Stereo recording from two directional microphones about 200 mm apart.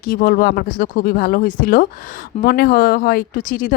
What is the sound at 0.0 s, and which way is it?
Speech, 45° left (ahead or behind).